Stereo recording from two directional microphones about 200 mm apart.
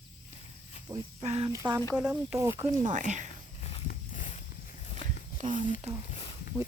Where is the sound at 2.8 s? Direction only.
40° right (ahead or behind).